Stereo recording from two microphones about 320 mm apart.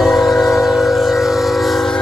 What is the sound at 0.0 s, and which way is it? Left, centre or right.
Train, centre.